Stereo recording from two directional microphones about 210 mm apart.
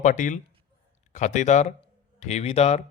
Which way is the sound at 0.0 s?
35° left (ahead or behind).